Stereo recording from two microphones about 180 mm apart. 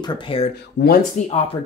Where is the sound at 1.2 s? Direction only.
45° left (ahead or behind).